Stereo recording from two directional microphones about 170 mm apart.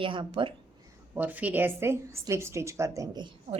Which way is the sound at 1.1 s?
10° right (ahead or behind).